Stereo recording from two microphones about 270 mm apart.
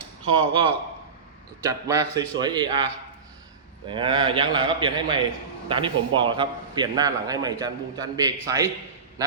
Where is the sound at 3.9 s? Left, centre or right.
Centre.